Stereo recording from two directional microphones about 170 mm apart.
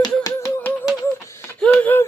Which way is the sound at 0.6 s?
10° left (ahead or behind).